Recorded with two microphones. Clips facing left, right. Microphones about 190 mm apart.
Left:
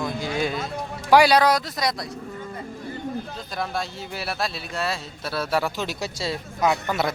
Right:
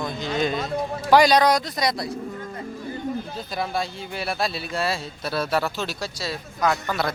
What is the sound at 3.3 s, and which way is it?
A man's voice, 5° right (ahead or behind).